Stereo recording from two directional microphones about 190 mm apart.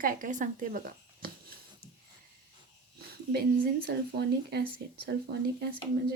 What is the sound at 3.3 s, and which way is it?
Speech, 55° right (ahead or behind).